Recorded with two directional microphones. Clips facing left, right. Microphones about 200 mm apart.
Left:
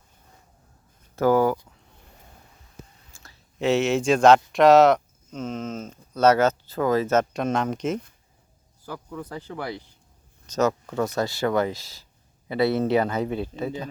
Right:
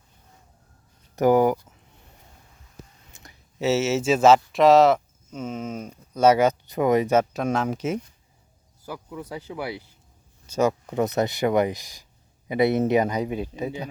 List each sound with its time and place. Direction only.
1.1 s speech: 15° right (ahead or behind)
3.1 s whispering: 20° right (ahead or behind)
3.6 s speech: 5° right (ahead or behind)